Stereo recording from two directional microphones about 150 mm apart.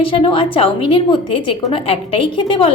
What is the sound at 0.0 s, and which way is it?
A woman's voice, 35° left (ahead or behind).